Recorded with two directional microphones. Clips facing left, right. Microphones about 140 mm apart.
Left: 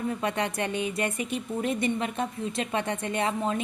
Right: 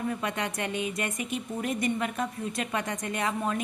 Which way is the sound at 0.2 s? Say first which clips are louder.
Left 3 dB; 30° left (ahead or behind).